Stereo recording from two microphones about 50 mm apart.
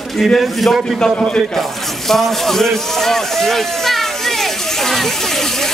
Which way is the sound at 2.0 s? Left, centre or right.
Centre.